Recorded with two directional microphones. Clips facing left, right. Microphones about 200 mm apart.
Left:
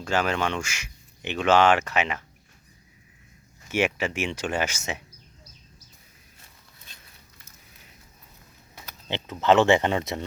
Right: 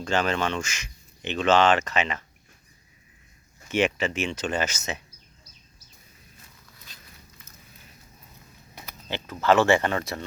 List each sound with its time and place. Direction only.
0.0 s speech: 10° left (ahead or behind)
3.7 s speech: 10° left (ahead or behind)
9.0 s speech: 20° left (ahead or behind)